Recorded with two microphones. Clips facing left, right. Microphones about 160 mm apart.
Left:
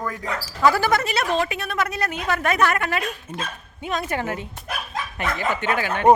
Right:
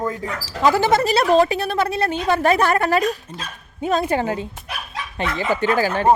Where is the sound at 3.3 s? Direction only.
10° right (ahead or behind).